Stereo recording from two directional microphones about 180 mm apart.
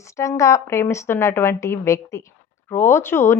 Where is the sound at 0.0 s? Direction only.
15° left (ahead or behind).